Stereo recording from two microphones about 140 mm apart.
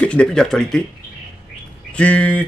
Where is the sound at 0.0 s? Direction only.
10° left (ahead or behind).